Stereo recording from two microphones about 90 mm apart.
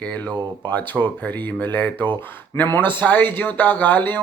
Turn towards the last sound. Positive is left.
turn(degrees=20)  # may be behind; listen again after turning